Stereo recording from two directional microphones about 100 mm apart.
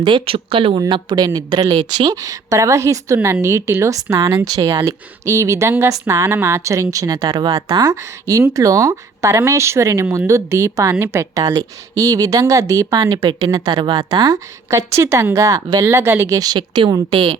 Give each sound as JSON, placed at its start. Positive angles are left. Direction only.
{"t": 0.0, "sound": "speech", "side_deg": -60}
{"t": 0.9, "sound": "a woman's voice", "side_deg": -45}
{"t": 14.9, "sound": "a woman's voice", "side_deg": -30}
{"t": 16.4, "sound": "a woman's voice", "side_deg": -40}